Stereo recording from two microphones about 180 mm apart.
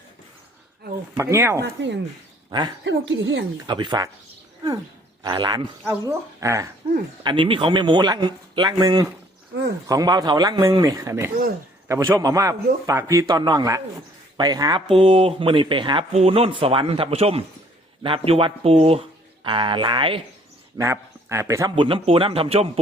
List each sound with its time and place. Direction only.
1.1 s speech: 15° right (ahead or behind)
1.8 s a woman's voice: 80° right
2.5 s speech: 25° right (ahead or behind)
2.8 s a woman's voice: 85° right
3.7 s a man's voice: 25° right (ahead or behind)
5.2 s a man's voice: 25° right (ahead or behind)
5.8 s speech: 5° right (ahead or behind)
6.4 s speech: 15° right (ahead or behind)
7.3 s a man's voice: 30° right (ahead or behind)
14.9 s a man's voice: 30° right (ahead or behind)
20.7 s speech: 15° right (ahead or behind)
21.8 s speech: 30° right (ahead or behind)